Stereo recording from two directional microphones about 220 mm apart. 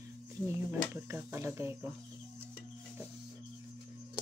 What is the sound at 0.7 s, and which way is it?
Speech, 10° right (ahead or behind).